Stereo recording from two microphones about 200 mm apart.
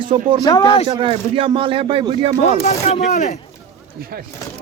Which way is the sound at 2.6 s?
30° left (ahead or behind).